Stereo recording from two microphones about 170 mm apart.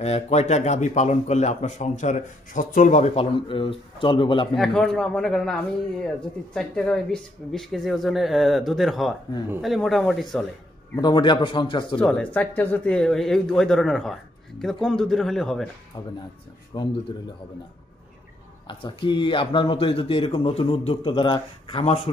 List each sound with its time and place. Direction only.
0.0 s speech: 40° left (ahead or behind)
4.6 s speech: centre (ahead or behind)
11.0 s speech: 25° left (ahead or behind)
12.0 s speech: 10° left (ahead or behind)
16.7 s speech: 25° left (ahead or behind)
18.7 s speech: 30° left (ahead or behind)